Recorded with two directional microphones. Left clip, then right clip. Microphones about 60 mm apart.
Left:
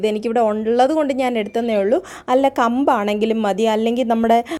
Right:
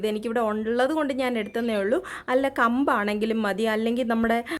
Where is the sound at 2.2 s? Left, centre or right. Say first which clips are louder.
Left 6 dB; left.